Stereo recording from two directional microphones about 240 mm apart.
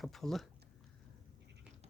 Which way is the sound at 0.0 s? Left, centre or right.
Centre.